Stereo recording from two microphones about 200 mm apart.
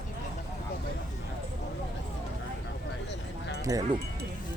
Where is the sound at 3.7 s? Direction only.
15° right (ahead or behind).